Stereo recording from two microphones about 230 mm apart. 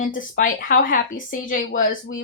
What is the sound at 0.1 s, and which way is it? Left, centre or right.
Speech, left.